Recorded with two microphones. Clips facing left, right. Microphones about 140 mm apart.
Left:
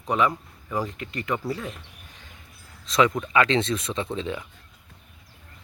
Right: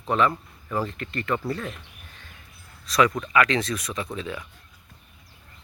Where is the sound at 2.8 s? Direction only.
25° left (ahead or behind).